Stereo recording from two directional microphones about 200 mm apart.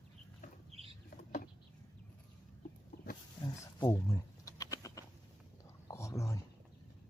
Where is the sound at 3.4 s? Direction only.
25° left (ahead or behind).